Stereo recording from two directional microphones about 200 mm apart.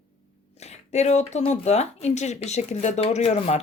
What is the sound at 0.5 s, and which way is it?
Speech, 35° left (ahead or behind).